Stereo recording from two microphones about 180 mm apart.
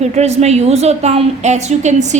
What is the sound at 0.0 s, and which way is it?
A woman's voice, 35° right (ahead or behind).